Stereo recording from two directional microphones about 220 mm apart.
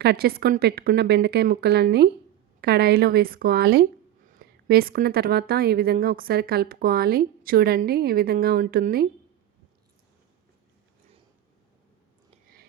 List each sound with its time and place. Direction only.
0.0 s a woman's voice: 45° right (ahead or behind)